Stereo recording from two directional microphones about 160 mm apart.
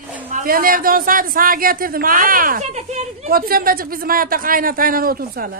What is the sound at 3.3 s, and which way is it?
Speech, 65° right (ahead or behind).